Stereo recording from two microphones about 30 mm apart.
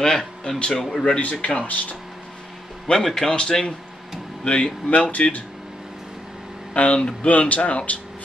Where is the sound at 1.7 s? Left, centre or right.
Left.